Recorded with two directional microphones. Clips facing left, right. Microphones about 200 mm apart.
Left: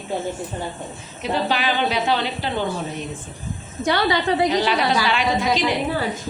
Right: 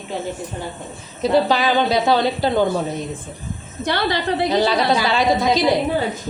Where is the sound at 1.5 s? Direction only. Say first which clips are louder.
Right 4 dB; 40° right (ahead or behind).